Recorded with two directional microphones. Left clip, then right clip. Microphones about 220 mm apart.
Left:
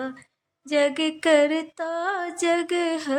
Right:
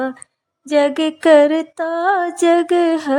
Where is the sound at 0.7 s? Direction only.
30° right (ahead or behind).